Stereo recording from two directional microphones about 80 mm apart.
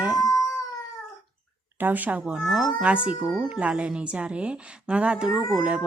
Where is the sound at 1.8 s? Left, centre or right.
Right.